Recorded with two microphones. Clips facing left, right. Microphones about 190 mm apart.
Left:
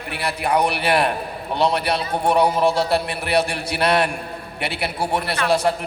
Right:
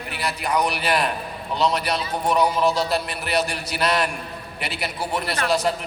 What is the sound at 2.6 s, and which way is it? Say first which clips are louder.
Speech: left 2 dB; 30° left (ahead or behind).